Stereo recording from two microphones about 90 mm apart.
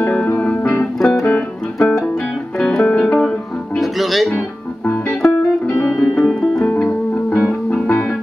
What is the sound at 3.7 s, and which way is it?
Music, centre (ahead or behind).